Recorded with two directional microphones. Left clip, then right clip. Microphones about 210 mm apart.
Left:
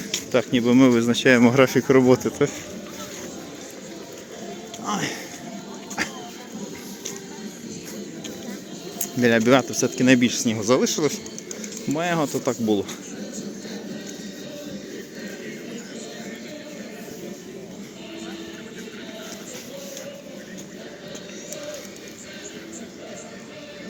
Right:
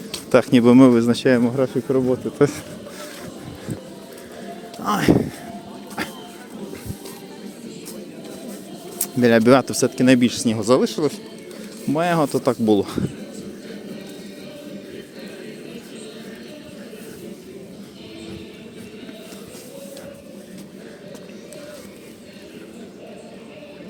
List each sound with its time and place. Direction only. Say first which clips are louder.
0.3 s speech: right 6 dB; 30° right (ahead or behind)
0.9 s speech: right 1 dB; 20° right (ahead or behind)
1.4 s speech: left 4 dB; 5° left (ahead or behind)
4.8 s speech: right 9 dB; 25° right (ahead or behind)
6.0 s vehicle: left 1 dB; 15° right (ahead or behind)
9.2 s speech: right 3 dB; 20° right (ahead or behind)
11.9 s speech: right 5 dB; 25° right (ahead or behind)